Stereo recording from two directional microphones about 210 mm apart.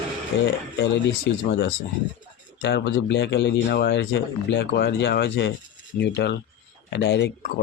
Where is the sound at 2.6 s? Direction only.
55° left (ahead or behind).